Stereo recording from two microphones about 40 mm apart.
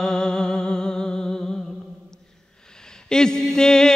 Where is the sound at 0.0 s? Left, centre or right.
Centre.